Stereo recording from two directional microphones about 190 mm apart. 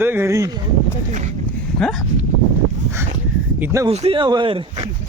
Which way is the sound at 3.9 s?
30° right (ahead or behind).